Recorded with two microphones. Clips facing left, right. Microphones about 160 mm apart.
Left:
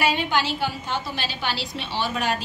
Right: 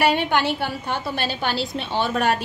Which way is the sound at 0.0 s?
60° right (ahead or behind).